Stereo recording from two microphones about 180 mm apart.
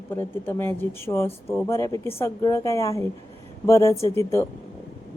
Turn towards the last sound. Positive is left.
turn(degrees=15)  # may be behind; listen again after turning